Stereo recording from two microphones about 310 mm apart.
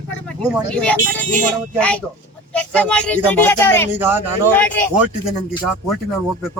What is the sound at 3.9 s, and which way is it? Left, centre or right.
Speech, centre.